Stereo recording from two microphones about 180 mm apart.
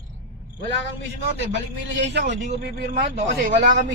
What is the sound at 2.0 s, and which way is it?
Speech, 70° right (ahead or behind).